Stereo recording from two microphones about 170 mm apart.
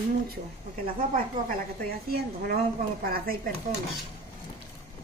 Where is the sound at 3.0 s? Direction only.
60° right (ahead or behind).